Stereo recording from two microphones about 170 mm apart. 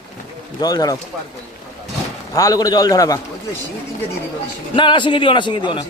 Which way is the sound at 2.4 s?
20° left (ahead or behind).